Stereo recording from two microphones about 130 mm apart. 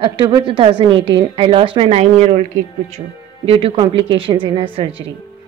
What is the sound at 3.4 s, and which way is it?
A woman's voice, 45° right (ahead or behind).